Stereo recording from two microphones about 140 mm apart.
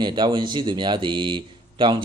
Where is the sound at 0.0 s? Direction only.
35° right (ahead or behind).